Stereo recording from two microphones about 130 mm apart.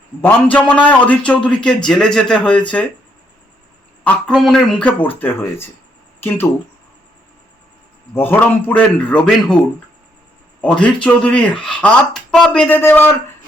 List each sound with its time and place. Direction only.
0.2 s a man's voice: 10° left (ahead or behind)
4.0 s a man's voice: 5° left (ahead or behind)
4.9 s a man's voice: 15° left (ahead or behind)
8.1 s a man's voice: 15° left (ahead or behind)
10.6 s a man's voice: 10° left (ahead or behind)